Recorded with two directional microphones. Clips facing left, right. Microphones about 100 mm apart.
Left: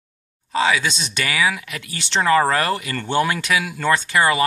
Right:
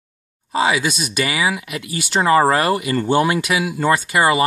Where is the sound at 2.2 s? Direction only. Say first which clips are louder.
Right 3 dB; 20° right (ahead or behind).